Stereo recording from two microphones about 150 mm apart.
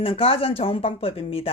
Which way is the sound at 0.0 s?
40° left (ahead or behind).